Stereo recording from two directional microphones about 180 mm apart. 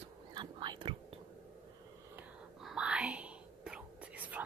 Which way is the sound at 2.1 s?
5° right (ahead or behind).